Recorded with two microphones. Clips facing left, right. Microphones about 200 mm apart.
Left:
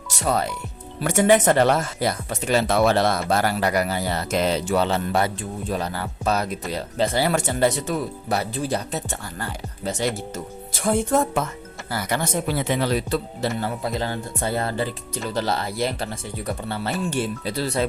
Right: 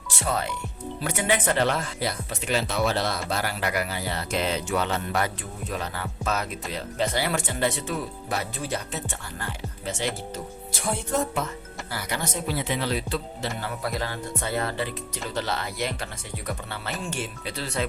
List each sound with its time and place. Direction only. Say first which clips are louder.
0.1 s speech: left 5 dB; 40° left (ahead or behind)
13.8 s speech: left 4 dB; 25° left (ahead or behind)